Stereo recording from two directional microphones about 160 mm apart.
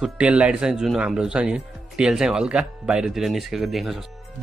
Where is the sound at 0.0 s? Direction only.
5° right (ahead or behind).